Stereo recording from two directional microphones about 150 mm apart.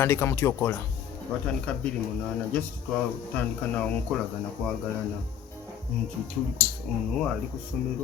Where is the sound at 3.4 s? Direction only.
10° left (ahead or behind).